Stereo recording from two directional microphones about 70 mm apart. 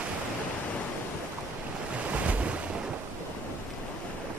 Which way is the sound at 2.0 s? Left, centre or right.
Centre.